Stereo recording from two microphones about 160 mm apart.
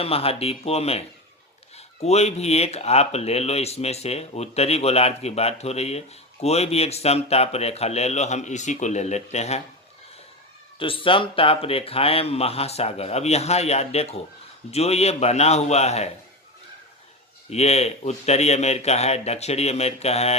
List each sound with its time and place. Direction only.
0.0 s speech: 40° left (ahead or behind)
10.8 s speech: 35° left (ahead or behind)
17.5 s speech: 40° left (ahead or behind)